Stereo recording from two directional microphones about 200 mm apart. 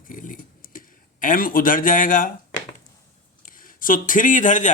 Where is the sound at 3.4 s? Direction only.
45° left (ahead or behind).